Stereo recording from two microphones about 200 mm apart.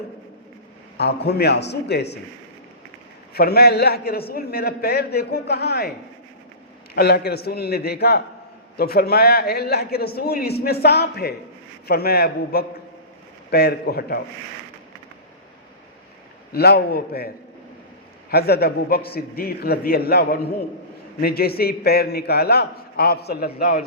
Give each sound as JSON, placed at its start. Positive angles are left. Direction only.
{"t": 0.9, "sound": "speech", "side_deg": 55}
{"t": 3.3, "sound": "a man's voice", "side_deg": 50}
{"t": 6.9, "sound": "a man's voice", "side_deg": 55}
{"t": 16.5, "sound": "a man's voice", "side_deg": 50}